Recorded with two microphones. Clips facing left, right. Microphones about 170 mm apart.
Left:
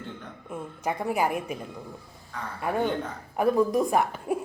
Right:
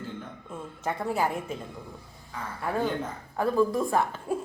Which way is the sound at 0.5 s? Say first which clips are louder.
Left 2 dB; 15° left (ahead or behind).